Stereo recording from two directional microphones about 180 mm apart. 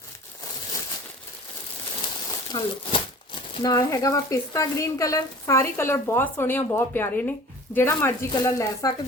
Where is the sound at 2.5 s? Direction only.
25° left (ahead or behind).